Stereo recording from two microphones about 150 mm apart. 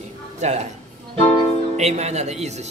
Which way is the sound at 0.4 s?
45° right (ahead or behind).